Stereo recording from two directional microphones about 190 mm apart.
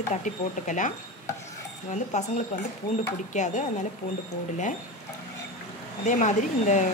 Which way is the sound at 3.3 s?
40° left (ahead or behind).